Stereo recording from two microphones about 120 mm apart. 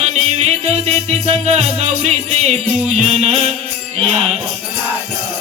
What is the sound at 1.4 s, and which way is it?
Music, 65° right (ahead or behind).